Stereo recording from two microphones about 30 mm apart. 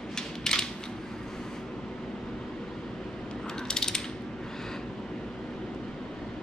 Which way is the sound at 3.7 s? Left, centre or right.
Left.